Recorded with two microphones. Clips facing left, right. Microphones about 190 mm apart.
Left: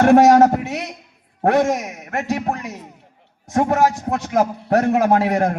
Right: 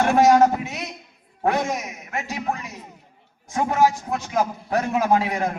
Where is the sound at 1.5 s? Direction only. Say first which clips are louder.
Left 6 dB; 70° left (ahead or behind).